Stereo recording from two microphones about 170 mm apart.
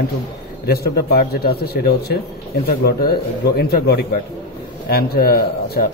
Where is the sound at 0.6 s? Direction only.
65° left (ahead or behind).